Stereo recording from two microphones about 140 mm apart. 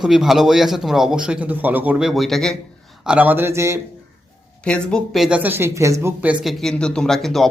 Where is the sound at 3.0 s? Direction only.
10° right (ahead or behind).